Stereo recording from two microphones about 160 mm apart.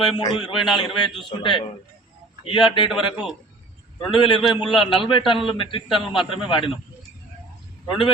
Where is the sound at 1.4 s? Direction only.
30° left (ahead or behind).